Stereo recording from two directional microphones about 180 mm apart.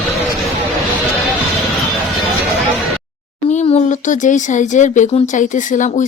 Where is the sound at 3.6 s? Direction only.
40° left (ahead or behind).